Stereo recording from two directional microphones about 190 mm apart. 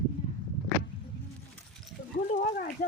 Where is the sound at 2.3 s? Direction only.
45° left (ahead or behind).